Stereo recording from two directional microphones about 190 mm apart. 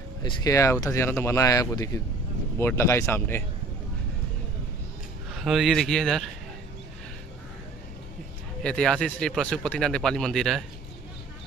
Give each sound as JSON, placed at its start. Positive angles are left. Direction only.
{"t": 0.2, "sound": "speech", "side_deg": 20}
{"t": 5.4, "sound": "speech", "side_deg": 0}
{"t": 8.6, "sound": "speech", "side_deg": 5}